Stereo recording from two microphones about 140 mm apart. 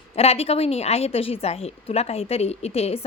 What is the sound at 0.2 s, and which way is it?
A woman's voice, 45° left (ahead or behind).